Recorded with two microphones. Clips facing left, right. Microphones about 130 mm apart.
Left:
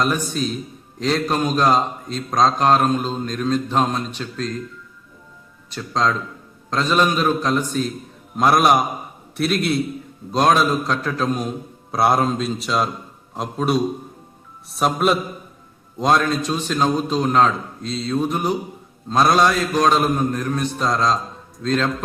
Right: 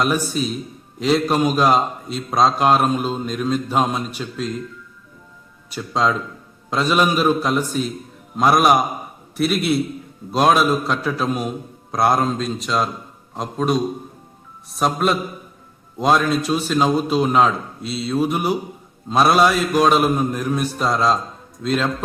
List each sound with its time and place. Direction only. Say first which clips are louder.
0.0 s a man's voice: right 1 dB; 5° right (ahead or behind)
5.7 s a man's voice: right 1 dB; 5° right (ahead or behind)